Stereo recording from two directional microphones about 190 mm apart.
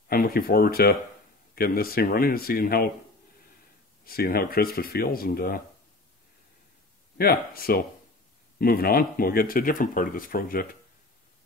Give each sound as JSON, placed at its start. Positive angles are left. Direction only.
{"t": 0.1, "sound": "speech", "side_deg": 50}
{"t": 4.0, "sound": "speech", "side_deg": 50}
{"t": 7.2, "sound": "speech", "side_deg": 50}